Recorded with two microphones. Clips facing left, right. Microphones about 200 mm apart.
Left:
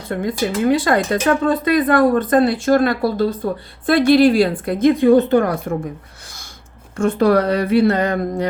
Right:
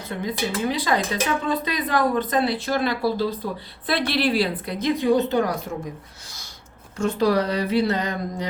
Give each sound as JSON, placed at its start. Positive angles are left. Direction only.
{"t": 0.1, "sound": "speech", "side_deg": 50}
{"t": 6.9, "sound": "speech", "side_deg": 55}